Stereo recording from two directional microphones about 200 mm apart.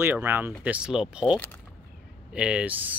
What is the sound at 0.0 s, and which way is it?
Speech, 10° right (ahead or behind).